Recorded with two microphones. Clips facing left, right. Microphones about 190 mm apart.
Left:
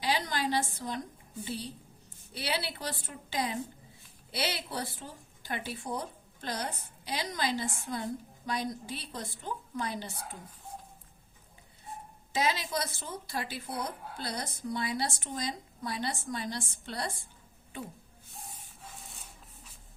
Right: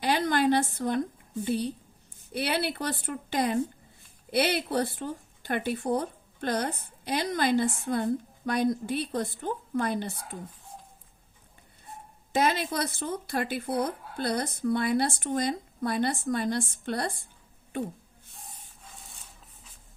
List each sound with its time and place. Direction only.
0.0 s a sound: 55° right (ahead or behind)
2.3 s a woman's voice: 55° right (ahead or behind)
12.3 s a woman's voice: 55° right (ahead or behind)